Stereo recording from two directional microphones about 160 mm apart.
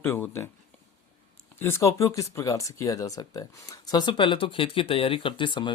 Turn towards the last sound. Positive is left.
turn(degrees=30)  # may be behind; listen again after turning